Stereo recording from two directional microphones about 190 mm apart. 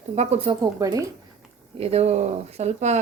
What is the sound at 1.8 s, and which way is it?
Speech, 35° right (ahead or behind).